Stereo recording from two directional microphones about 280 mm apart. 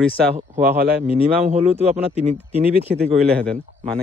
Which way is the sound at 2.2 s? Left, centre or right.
Right.